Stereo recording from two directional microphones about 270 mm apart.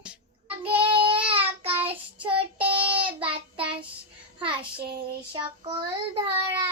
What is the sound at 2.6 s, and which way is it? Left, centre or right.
Child singing, centre.